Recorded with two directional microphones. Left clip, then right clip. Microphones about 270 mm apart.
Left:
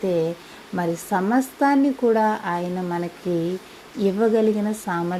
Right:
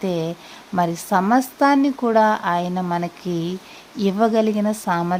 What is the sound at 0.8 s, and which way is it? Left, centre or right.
Speech, centre.